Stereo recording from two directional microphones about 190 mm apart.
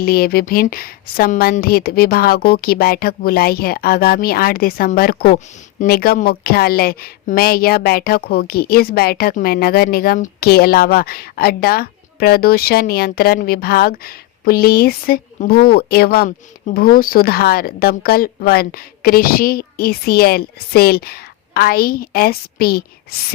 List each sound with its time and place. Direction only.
0.0 s a woman's voice: 50° left (ahead or behind)